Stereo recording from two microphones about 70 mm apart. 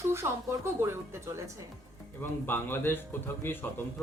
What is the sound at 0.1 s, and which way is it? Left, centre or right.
Speech, right.